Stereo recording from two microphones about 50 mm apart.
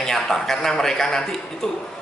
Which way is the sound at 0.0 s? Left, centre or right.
Centre.